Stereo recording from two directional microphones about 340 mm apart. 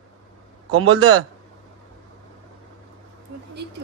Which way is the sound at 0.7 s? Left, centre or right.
Right.